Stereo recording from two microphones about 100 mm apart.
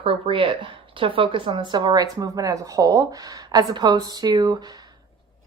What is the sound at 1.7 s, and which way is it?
A woman's voice, 45° right (ahead or behind).